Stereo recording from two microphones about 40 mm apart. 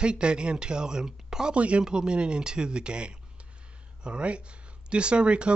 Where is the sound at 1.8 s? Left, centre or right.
Right.